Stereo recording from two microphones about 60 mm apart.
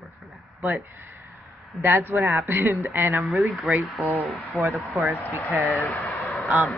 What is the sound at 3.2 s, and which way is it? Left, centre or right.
A man's voice, centre.